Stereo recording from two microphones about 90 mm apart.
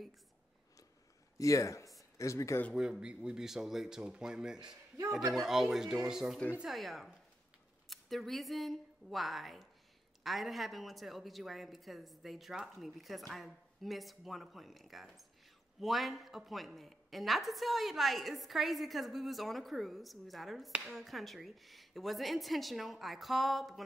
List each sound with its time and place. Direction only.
1.4 s speech: 35° left (ahead or behind)
2.7 s a woman's voice: 10° right (ahead or behind)